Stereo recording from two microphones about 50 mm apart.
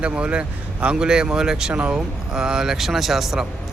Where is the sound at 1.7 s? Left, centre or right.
Right.